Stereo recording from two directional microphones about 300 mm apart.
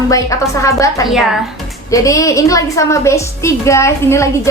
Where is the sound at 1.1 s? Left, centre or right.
Centre.